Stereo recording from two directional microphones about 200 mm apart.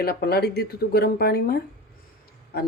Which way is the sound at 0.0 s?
50° left (ahead or behind).